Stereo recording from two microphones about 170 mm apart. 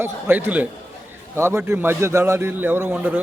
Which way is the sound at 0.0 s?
10° right (ahead or behind).